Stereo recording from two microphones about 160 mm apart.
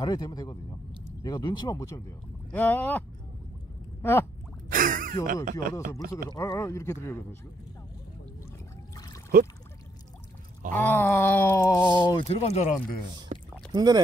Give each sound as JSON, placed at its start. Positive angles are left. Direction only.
{"t": 0.0, "sound": "speech", "side_deg": 25}
{"t": 4.0, "sound": "a sound", "side_deg": 15}
{"t": 4.6, "sound": "a sound", "side_deg": -60}
{"t": 5.2, "sound": "speech", "side_deg": -60}
{"t": 6.3, "sound": "speech", "side_deg": 20}
{"t": 10.7, "sound": "groan", "side_deg": 10}
{"t": 12.0, "sound": "speech", "side_deg": 30}
{"t": 12.3, "sound": "speech", "side_deg": 40}
{"t": 13.3, "sound": "rowboat", "side_deg": -50}
{"t": 13.7, "sound": "speech", "side_deg": -25}